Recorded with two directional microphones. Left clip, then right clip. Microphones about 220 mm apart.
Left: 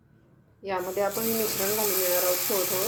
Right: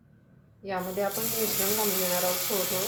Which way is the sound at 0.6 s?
50° left (ahead or behind).